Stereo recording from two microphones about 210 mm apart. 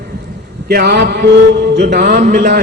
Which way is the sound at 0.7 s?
50° right (ahead or behind).